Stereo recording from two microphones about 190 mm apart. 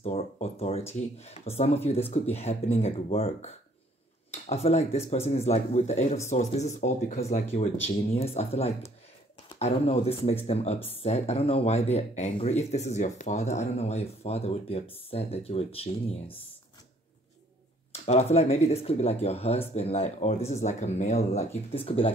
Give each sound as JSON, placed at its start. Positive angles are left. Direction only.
{"t": 0.0, "sound": "speech", "side_deg": 35}
{"t": 18.0, "sound": "speech", "side_deg": 35}